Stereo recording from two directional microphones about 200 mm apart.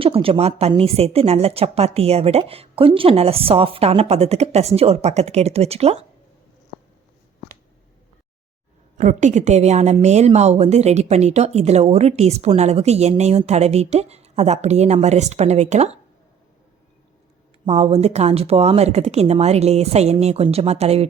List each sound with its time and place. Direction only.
0.0 s a woman's voice: 30° right (ahead or behind)
9.0 s a woman's voice: 35° right (ahead or behind)
17.7 s a woman's voice: 30° right (ahead or behind)